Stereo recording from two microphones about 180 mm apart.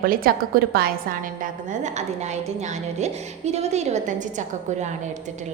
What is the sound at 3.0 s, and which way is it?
A woman's voice, 40° right (ahead or behind).